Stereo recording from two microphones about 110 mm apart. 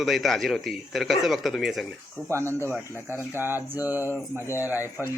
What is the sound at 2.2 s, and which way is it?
A man's voice, 25° right (ahead or behind).